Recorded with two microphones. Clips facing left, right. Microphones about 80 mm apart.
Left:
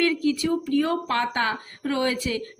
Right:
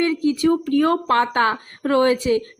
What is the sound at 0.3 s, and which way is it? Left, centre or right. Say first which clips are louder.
Speech: right 5 dB; right.